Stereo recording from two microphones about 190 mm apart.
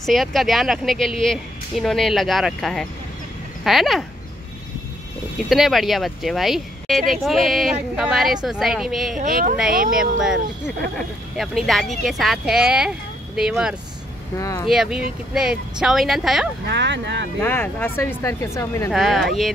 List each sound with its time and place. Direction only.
0.0 s speech: centre (ahead or behind)
5.5 s speech: centre (ahead or behind)
9.2 s speech: 45° right (ahead or behind)
9.9 s speech: 5° right (ahead or behind)
14.4 s speech: 15° left (ahead or behind)
14.7 s speech: centre (ahead or behind)
16.6 s speech: 65° right (ahead or behind)
17.4 s speech: 10° left (ahead or behind)
18.9 s speech: centre (ahead or behind)